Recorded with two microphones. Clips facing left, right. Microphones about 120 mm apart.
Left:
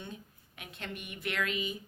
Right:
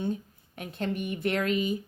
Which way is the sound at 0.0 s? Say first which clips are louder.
Right 14 dB; 40° right (ahead or behind).